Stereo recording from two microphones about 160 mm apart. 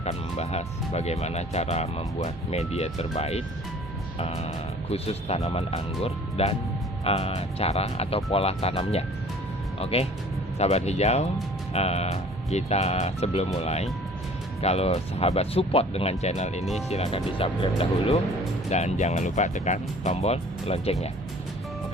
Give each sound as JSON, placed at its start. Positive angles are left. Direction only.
{"t": 0.0, "sound": "speech", "side_deg": 40}